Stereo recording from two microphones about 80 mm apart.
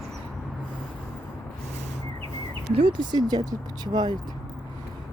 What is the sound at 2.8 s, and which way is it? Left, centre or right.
Speech, right.